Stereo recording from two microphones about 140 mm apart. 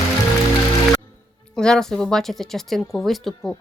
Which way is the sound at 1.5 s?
5° left (ahead or behind).